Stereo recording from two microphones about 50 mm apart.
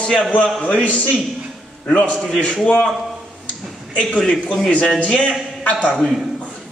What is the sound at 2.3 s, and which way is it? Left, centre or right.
Speech, centre.